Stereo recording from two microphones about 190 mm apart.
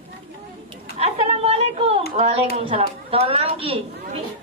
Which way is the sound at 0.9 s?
35° right (ahead or behind).